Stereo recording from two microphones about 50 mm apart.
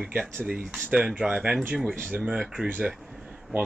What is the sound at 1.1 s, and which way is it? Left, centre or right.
Speech, centre.